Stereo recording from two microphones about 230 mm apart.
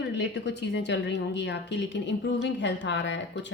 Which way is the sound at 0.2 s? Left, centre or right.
Left.